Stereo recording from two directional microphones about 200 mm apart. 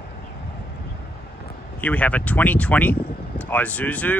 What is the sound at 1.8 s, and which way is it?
Speech, 5° left (ahead or behind).